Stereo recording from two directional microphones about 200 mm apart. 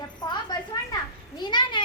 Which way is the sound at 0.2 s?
20° left (ahead or behind).